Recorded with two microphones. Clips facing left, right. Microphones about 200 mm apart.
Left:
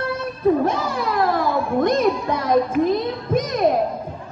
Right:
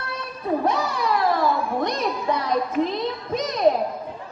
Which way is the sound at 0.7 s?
50° left (ahead or behind).